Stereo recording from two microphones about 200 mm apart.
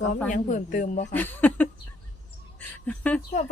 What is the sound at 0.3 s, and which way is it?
Speech, 40° left (ahead or behind).